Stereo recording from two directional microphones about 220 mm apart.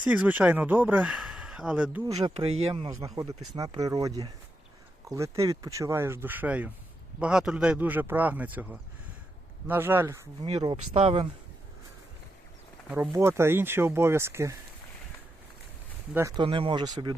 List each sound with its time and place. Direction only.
0.0 s speech: 5° right (ahead or behind)
2.0 s speech: 15° right (ahead or behind)
2.6 s speech: 25° right (ahead or behind)
2.9 s speech: 15° right (ahead or behind)
10.4 s speech: 20° right (ahead or behind)
12.9 s speech: 10° right (ahead or behind)
16.1 s speech: 15° right (ahead or behind)